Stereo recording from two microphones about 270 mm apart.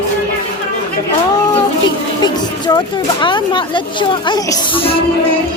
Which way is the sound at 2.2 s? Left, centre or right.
Centre.